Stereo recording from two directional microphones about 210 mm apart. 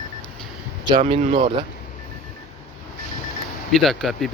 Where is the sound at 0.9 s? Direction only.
30° right (ahead or behind).